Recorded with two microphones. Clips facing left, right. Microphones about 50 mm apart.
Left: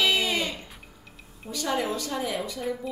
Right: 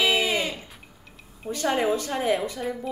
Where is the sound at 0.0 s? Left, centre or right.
Centre.